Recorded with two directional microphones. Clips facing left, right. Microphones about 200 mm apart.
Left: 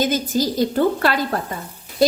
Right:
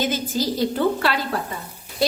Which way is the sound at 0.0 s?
45° left (ahead or behind).